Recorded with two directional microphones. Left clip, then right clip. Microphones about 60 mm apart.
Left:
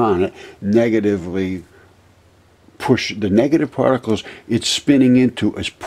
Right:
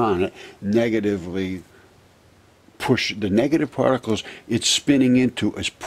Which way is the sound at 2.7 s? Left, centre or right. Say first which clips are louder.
Left 3 dB; centre.